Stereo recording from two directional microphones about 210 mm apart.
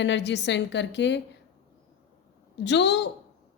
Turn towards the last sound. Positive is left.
turn(degrees=55)  # may be behind; listen again after turning